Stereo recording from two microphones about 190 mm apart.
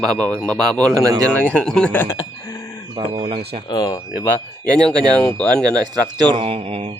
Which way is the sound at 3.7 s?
20° left (ahead or behind).